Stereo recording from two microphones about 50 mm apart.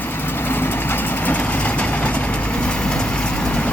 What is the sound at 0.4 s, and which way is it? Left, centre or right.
Vehicle, left.